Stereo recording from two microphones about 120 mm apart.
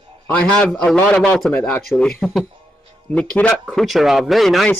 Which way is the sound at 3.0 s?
10° left (ahead or behind).